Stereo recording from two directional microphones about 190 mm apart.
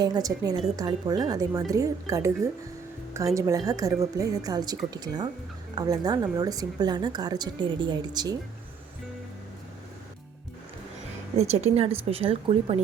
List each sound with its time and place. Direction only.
0.0 s a woman's voice: 20° right (ahead or behind)
11.3 s speech: 35° right (ahead or behind)